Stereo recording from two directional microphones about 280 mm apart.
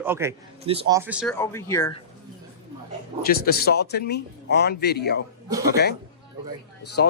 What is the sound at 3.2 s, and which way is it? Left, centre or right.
A man's voice, left.